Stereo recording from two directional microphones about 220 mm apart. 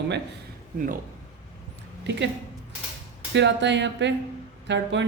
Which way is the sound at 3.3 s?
55° right (ahead or behind).